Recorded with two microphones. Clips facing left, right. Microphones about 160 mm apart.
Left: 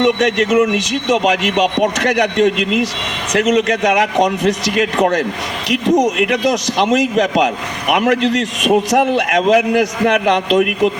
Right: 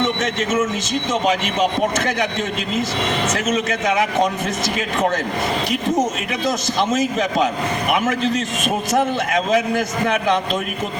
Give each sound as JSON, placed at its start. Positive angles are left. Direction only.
{"t": 0.0, "sound": "a man's voice", "side_deg": 70}